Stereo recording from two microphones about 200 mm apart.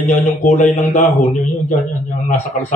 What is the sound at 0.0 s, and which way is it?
Speech, 40° left (ahead or behind).